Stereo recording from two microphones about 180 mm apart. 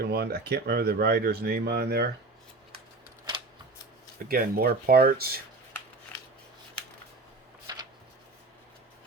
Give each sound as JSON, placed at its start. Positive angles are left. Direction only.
{"t": 0.0, "sound": "speech", "side_deg": -60}
{"t": 4.3, "sound": "speech", "side_deg": -55}
{"t": 7.7, "sound": "a sound", "side_deg": -20}